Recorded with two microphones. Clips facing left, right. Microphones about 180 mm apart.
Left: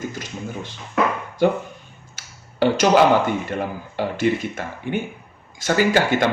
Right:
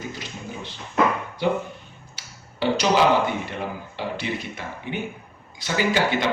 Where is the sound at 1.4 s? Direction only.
45° left (ahead or behind).